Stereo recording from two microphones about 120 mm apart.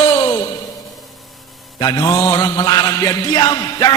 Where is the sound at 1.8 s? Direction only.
30° left (ahead or behind).